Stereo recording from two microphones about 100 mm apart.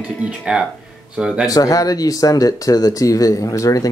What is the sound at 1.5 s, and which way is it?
Speech, 35° left (ahead or behind).